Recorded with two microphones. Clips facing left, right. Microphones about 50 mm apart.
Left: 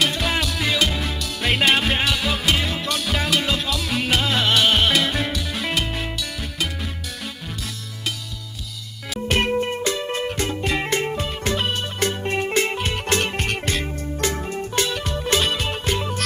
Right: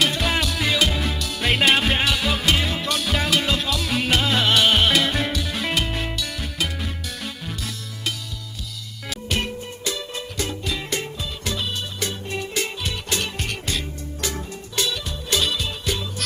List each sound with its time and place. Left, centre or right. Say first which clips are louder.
0.0 s music: even; centre
9.3 s music: left 8 dB; left
9.9 s music: left 6 dB; left